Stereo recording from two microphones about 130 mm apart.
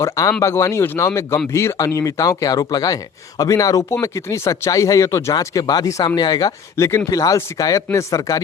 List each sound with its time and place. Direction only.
0.0 s speech: 25° left (ahead or behind)